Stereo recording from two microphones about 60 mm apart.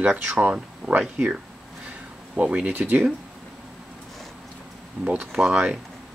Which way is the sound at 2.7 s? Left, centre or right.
Right.